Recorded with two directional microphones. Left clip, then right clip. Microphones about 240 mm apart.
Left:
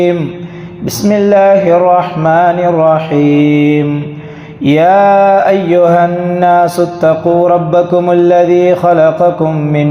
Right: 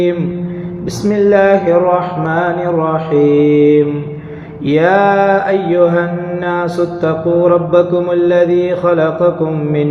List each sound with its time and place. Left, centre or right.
1.0 s mantra: left